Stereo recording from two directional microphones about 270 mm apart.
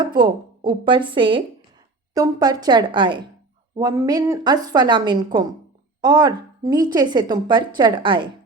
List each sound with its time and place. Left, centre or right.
0.0 s a woman's voice: centre